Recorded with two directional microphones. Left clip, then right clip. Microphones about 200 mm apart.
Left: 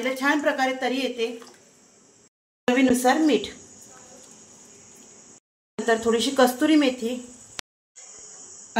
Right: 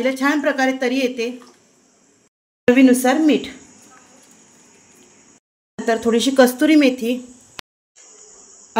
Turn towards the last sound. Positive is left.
turn(degrees=0)  # may be behind; listen again after turning